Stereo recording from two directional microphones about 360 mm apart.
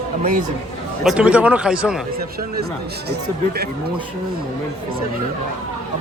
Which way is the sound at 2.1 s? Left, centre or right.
Right.